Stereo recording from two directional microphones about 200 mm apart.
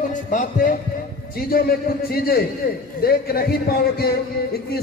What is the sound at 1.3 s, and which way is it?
A man's voice, 50° left (ahead or behind).